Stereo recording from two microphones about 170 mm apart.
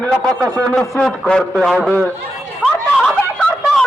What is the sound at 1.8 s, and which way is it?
Speech, 10° right (ahead or behind).